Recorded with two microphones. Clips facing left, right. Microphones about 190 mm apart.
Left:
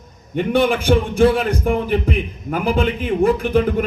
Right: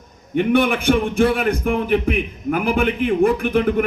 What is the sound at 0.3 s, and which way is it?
A man's voice, 60° right (ahead or behind).